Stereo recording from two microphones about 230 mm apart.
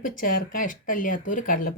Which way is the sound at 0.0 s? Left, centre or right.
Left.